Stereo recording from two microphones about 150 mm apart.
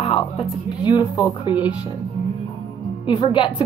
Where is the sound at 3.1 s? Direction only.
35° left (ahead or behind).